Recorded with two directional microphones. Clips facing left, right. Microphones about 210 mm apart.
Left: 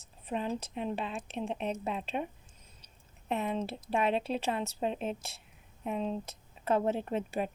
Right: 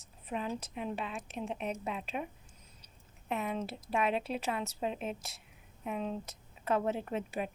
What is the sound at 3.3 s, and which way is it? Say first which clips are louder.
A woman's voice: left 3 dB; 30° left (ahead or behind).